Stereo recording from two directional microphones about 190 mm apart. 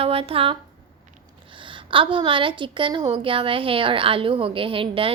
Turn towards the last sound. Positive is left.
turn(degrees=-30)  # may be behind; listen again after turning